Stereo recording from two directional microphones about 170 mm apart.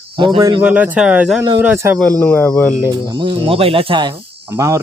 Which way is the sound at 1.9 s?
10° left (ahead or behind).